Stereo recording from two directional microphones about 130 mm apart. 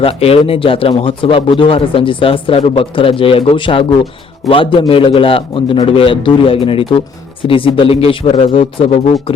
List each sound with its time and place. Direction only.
0.0 s speech: 50° left (ahead or behind)